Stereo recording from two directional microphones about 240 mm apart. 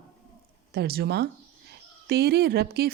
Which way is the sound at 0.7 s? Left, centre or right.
Right.